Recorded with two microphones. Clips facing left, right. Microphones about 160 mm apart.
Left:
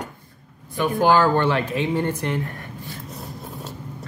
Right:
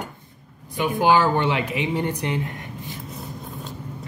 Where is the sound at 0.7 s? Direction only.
15° right (ahead or behind).